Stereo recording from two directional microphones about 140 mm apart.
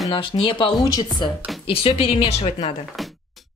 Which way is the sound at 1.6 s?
45° left (ahead or behind).